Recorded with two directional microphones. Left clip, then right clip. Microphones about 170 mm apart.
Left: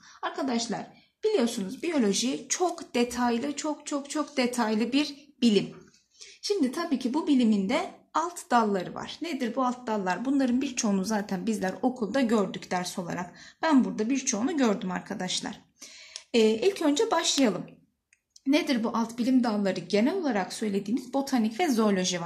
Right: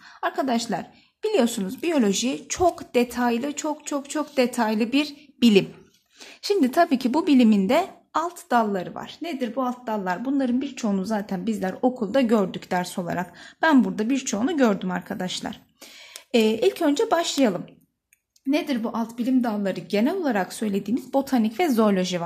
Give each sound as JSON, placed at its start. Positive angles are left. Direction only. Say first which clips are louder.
{"t": 0.2, "sound": "a woman's voice", "louder": "right 6 dB", "side_deg": -50}
{"t": 5.4, "sound": "a woman's voice", "louder": "right 6 dB", "side_deg": -55}
{"t": 8.2, "sound": "a woman's voice", "louder": "right 3 dB", "side_deg": -25}
{"t": 16.3, "sound": "a woman's voice", "louder": "right 3 dB", "side_deg": -50}
{"t": 18.5, "sound": "a woman's voice", "louder": "right 1 dB", "side_deg": -10}